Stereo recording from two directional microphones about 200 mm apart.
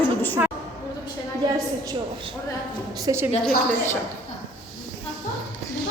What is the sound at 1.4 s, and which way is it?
Speech, 20° right (ahead or behind).